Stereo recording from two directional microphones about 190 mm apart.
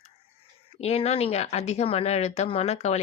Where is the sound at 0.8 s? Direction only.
35° left (ahead or behind).